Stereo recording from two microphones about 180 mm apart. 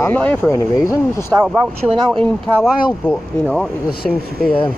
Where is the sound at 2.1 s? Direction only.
5° left (ahead or behind).